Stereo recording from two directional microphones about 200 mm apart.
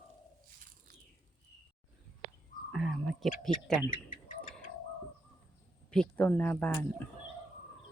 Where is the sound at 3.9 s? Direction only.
40° left (ahead or behind).